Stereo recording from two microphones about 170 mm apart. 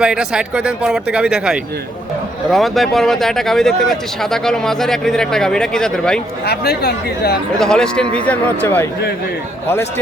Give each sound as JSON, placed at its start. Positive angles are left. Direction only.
{"t": 0.0, "sound": "speech", "side_deg": -5}
{"t": 6.4, "sound": "speech", "side_deg": 70}
{"t": 7.6, "sound": "speech", "side_deg": 5}